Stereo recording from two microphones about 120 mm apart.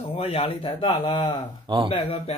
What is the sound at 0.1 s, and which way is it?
Speech, 55° left (ahead or behind).